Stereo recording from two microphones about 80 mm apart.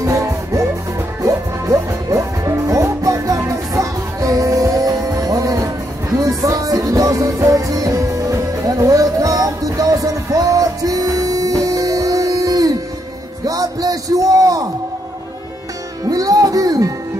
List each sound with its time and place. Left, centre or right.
0.0 s music: right
16.1 s music: right